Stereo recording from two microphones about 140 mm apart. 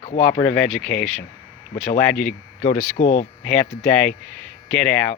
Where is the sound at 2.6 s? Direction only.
65° left (ahead or behind).